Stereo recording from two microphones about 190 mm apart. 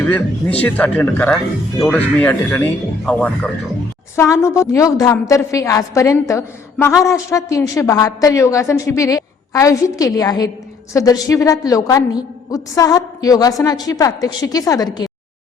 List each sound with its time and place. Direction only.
0.6 s a woman's voice: 5° left (ahead or behind)